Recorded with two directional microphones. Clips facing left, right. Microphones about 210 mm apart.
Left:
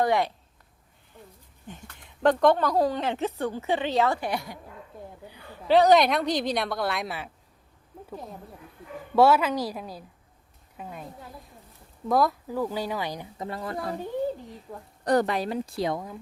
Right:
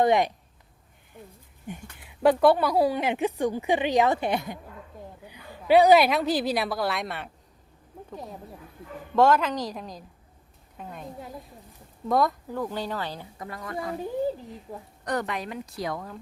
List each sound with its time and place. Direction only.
0.0 s speech: 20° right (ahead or behind)
1.6 s a woman's voice: 10° right (ahead or behind)
9.1 s a woman's voice: 10° left (ahead or behind)
12.0 s speech: centre (ahead or behind)
13.4 s a woman's voice: 30° left (ahead or behind)
15.0 s speech: 35° left (ahead or behind)